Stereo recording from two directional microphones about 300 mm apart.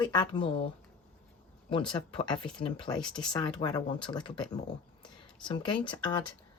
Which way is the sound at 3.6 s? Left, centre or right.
Centre.